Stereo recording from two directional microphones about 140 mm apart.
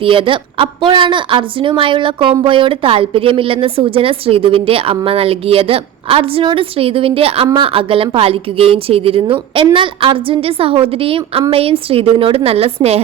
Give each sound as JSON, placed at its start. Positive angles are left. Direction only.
{"t": 0.0, "sound": "a woman's voice", "side_deg": -40}